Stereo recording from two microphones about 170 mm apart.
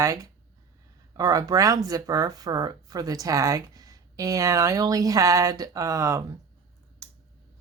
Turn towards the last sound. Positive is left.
turn(degrees=-15)  # may be behind; listen again after turning